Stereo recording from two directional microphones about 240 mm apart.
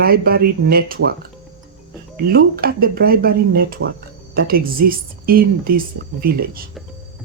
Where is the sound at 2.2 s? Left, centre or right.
Right.